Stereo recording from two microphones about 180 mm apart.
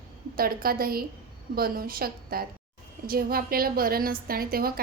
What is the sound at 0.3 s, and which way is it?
A woman's voice, 55° right (ahead or behind).